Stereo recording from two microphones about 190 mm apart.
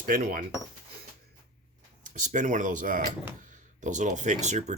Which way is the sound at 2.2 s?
40° right (ahead or behind).